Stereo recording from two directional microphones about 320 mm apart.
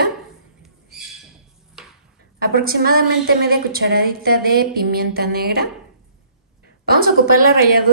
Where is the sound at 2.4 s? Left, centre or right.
Right.